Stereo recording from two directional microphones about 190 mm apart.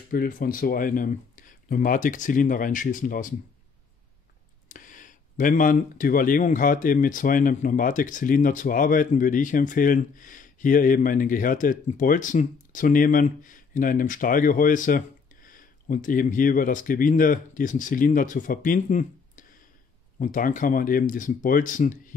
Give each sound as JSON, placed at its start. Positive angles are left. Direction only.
{"t": 0.1, "sound": "speech", "side_deg": 45}
{"t": 4.6, "sound": "speech", "side_deg": 45}